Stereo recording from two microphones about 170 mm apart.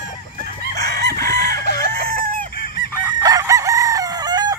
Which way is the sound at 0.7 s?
70° right (ahead or behind).